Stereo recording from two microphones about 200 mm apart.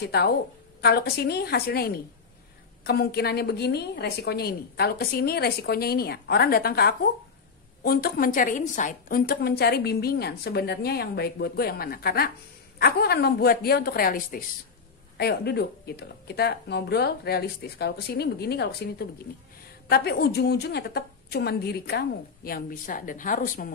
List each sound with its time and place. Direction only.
0.8 s a woman's voice: 50° left (ahead or behind)